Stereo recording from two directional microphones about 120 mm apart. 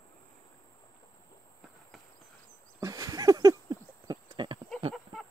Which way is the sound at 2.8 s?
25° right (ahead or behind).